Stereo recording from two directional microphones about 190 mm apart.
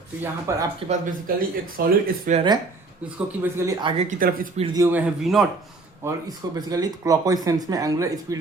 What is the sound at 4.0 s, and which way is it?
Speech, 45° right (ahead or behind).